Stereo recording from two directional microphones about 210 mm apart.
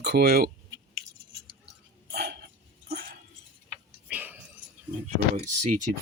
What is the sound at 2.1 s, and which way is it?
Dog, 50° right (ahead or behind).